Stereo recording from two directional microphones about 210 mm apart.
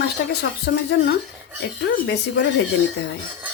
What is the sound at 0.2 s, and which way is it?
Speech, 55° left (ahead or behind).